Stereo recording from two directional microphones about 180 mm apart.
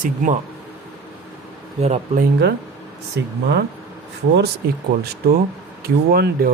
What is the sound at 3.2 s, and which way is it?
Speech, 70° right (ahead or behind).